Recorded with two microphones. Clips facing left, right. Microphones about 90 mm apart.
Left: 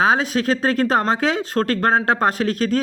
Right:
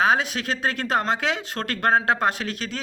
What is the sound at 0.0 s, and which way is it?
Speech, 35° left (ahead or behind).